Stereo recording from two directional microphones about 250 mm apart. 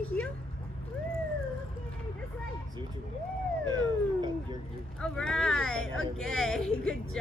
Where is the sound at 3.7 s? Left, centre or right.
Centre.